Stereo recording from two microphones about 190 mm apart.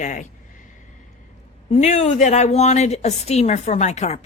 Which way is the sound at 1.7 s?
35° left (ahead or behind).